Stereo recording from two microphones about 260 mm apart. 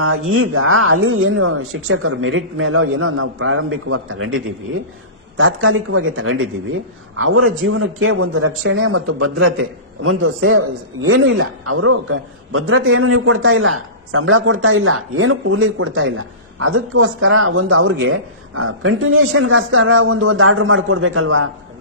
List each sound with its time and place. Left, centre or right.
0.3 s a man's voice: right
5.4 s a man's voice: right